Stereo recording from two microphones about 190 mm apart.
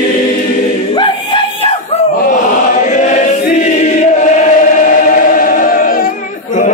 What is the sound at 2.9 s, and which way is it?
Choir, 40° left (ahead or behind).